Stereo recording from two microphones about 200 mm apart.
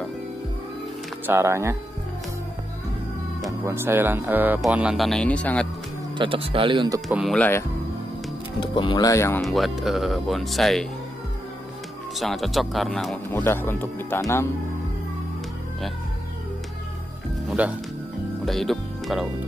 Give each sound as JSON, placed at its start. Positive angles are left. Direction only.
{"t": 1.2, "sound": "speech", "side_deg": -10}
{"t": 3.6, "sound": "speech", "side_deg": -10}
{"t": 6.1, "sound": "speech", "side_deg": -25}
{"t": 7.1, "sound": "speech", "side_deg": 0}
{"t": 8.5, "sound": "speech", "side_deg": 25}
{"t": 9.4, "sound": "speech", "side_deg": 0}
{"t": 12.2, "sound": "speech", "side_deg": 0}
{"t": 17.5, "sound": "speech", "side_deg": -5}